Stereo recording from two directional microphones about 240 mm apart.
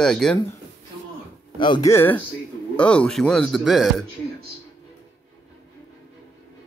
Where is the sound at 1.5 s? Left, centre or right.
Centre.